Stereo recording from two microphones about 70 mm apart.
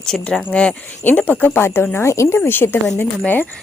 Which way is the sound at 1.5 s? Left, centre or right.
Left.